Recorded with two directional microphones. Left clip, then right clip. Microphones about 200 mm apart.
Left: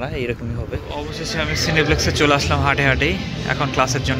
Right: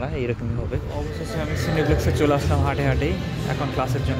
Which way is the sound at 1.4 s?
5° right (ahead or behind).